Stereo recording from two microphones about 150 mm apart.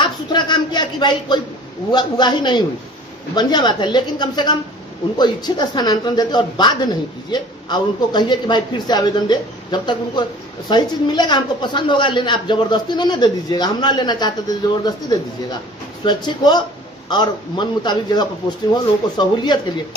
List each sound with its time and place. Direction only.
0.0 s a sound: 30° left (ahead or behind)
1.9 s speech: 30° left (ahead or behind)
16.0 s speech: 30° left (ahead or behind)